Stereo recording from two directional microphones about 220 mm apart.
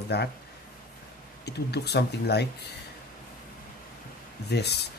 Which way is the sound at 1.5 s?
50° left (ahead or behind).